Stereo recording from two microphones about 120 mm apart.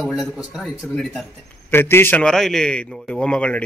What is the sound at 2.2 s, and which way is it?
A man's voice, 5° left (ahead or behind).